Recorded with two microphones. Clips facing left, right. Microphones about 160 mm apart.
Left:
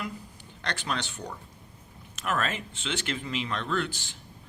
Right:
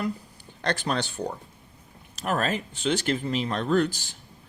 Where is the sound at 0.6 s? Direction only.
35° right (ahead or behind).